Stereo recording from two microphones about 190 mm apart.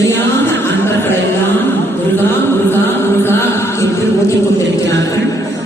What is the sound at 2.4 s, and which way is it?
Music, 10° left (ahead or behind).